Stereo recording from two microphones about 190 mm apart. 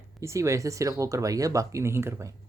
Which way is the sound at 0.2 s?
15° right (ahead or behind).